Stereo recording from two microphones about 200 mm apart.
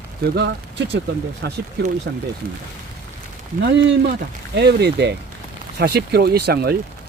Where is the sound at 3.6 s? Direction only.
55° right (ahead or behind).